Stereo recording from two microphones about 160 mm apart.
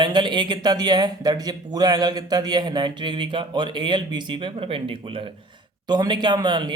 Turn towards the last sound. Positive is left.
turn(degrees=-30)  # may be behind; listen again after turning